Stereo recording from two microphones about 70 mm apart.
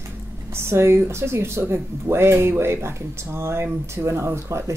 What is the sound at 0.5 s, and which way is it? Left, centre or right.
Speech, right.